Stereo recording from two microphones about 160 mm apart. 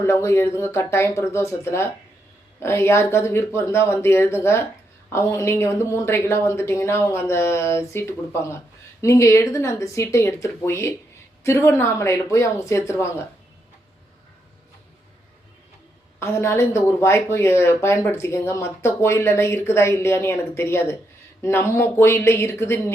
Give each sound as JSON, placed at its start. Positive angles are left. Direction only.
{"t": 0.0, "sound": "a woman's voice", "side_deg": 15}
{"t": 16.2, "sound": "a woman's voice", "side_deg": 15}